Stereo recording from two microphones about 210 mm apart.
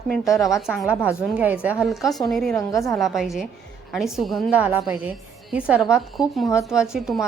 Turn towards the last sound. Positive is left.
turn(degrees=0)  # may be behind; listen again after turning